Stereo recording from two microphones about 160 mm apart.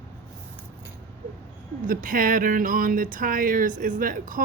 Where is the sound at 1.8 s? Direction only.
55° right (ahead or behind).